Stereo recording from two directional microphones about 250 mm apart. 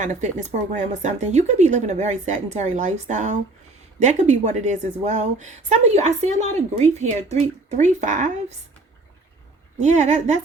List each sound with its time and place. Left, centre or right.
0.0 s speech: right
9.7 s speech: right